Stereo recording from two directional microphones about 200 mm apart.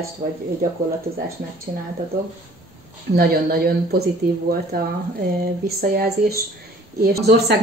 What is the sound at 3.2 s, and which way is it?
Speech, 50° right (ahead or behind).